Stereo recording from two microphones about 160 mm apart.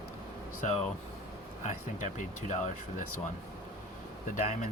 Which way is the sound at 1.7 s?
55° left (ahead or behind).